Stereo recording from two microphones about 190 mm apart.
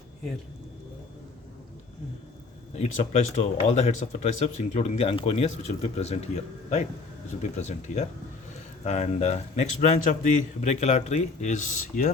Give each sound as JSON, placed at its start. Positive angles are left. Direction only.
{"t": 2.7, "sound": "speech", "side_deg": 35}